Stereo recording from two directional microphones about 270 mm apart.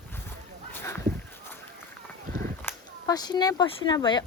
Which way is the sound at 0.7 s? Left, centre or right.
Centre.